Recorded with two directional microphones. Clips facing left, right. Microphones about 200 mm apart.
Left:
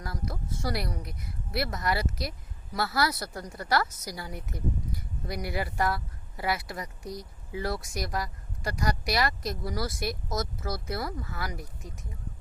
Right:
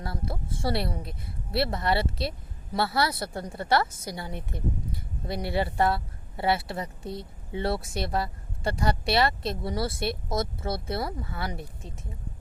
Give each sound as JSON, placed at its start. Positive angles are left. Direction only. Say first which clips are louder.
{"t": 0.0, "sound": "a woman's voice", "louder": "right 2 dB", "side_deg": -30}